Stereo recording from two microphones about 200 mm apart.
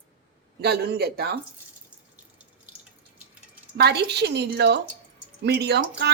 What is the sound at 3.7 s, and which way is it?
A woman's voice, 55° right (ahead or behind).